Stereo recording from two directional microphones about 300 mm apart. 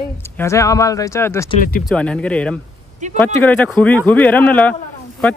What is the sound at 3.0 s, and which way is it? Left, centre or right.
Speech, right.